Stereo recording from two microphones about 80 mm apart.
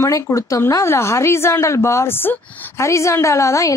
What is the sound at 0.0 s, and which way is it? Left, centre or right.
A woman's voice, left.